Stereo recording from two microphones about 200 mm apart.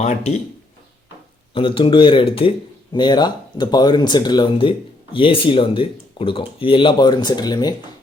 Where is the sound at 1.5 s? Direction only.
25° left (ahead or behind).